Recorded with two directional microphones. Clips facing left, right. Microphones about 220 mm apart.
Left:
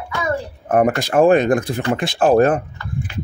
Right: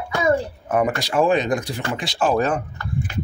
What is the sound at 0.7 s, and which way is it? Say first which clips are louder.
Speech: left 5 dB; 50° left (ahead or behind).